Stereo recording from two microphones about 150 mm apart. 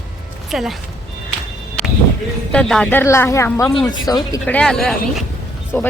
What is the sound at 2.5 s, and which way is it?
Speech, 5° left (ahead or behind).